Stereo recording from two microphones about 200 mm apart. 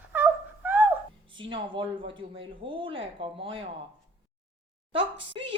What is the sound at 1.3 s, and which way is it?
Speech, 25° right (ahead or behind).